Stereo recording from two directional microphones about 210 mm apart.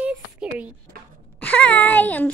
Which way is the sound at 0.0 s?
5° right (ahead or behind).